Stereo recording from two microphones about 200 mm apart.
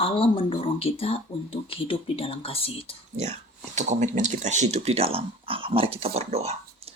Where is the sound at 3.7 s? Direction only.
35° right (ahead or behind).